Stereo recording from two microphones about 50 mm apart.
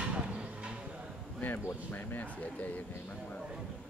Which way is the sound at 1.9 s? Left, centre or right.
Left.